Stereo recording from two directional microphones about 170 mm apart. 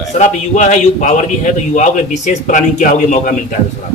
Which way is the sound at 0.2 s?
45° left (ahead or behind).